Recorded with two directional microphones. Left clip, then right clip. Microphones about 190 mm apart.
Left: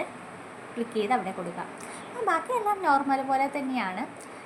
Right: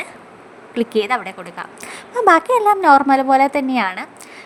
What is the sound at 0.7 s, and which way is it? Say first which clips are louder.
A woman's voice: right 9 dB; 55° right (ahead or behind).